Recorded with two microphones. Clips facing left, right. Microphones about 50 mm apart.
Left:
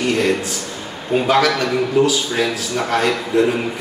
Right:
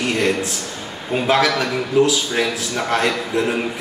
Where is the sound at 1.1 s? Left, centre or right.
Centre.